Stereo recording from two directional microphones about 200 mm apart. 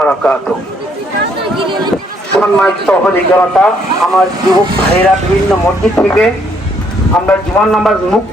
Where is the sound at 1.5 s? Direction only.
25° right (ahead or behind).